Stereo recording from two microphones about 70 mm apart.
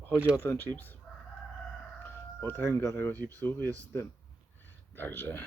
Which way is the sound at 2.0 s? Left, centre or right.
Left.